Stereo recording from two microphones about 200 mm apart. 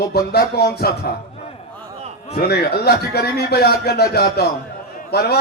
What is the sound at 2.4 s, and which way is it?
A man's voice, 55° left (ahead or behind).